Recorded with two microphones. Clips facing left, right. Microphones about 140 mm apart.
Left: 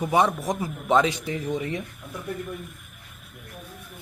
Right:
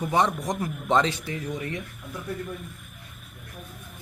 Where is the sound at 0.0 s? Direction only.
10° left (ahead or behind).